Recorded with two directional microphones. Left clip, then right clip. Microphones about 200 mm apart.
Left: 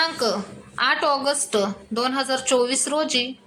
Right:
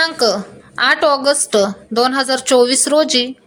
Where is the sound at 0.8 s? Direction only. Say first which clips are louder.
Right 7 dB; 20° right (ahead or behind).